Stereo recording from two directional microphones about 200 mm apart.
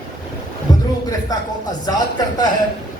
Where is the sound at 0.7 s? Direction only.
20° left (ahead or behind).